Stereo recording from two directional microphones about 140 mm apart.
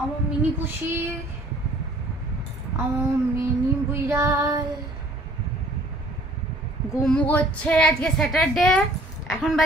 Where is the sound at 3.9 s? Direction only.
20° right (ahead or behind).